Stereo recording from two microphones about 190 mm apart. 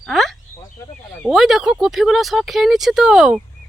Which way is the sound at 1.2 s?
Centre (ahead or behind).